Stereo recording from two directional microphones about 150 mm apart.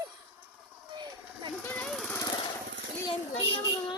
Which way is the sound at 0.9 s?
30° right (ahead or behind).